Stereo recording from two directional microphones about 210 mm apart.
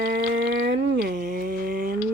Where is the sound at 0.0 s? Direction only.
50° right (ahead or behind).